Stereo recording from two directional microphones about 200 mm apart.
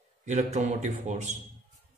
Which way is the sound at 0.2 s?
35° right (ahead or behind).